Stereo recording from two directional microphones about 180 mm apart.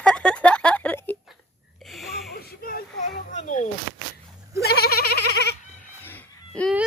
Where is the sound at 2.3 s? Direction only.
55° left (ahead or behind).